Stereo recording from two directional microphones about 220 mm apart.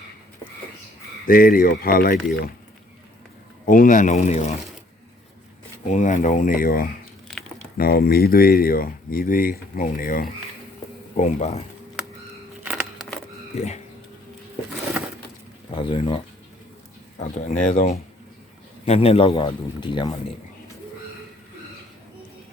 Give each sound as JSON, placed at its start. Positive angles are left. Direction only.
{"t": 1.3, "sound": "speech", "side_deg": 40}
{"t": 3.7, "sound": "speech", "side_deg": 35}
{"t": 5.9, "sound": "speech", "side_deg": 35}
{"t": 12.6, "sound": "a sound", "side_deg": -5}
{"t": 15.7, "sound": "speech", "side_deg": 25}
{"t": 17.2, "sound": "speech", "side_deg": 35}